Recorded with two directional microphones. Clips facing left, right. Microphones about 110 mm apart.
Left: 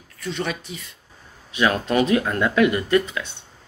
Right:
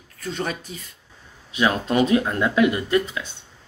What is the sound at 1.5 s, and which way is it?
Speech, 25° right (ahead or behind).